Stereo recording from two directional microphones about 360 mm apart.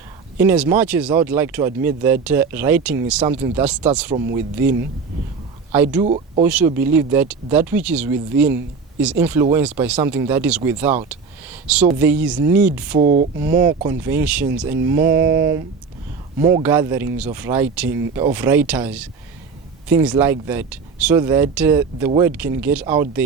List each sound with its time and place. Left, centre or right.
0.3 s speech: centre
5.7 s speech: centre
6.1 s speech: centre
6.4 s speech: centre
13.0 s speech: right
13.4 s speech: centre